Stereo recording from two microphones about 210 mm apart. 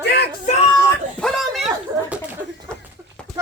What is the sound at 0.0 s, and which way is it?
Music, 50° left (ahead or behind).